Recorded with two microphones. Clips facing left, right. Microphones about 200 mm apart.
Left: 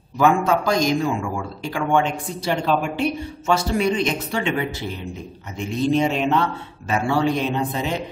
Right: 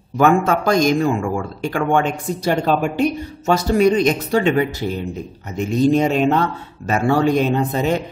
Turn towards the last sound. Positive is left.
turn(degrees=-45)  # may be behind; listen again after turning